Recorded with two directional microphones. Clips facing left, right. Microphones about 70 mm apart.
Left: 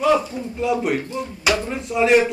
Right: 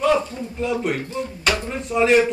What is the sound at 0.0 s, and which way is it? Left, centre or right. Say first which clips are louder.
Speech: left 1 dB; centre.